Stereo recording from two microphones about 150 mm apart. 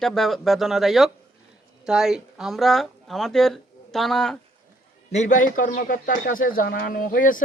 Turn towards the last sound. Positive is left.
turn(degrees=65)  # may be behind; listen again after turning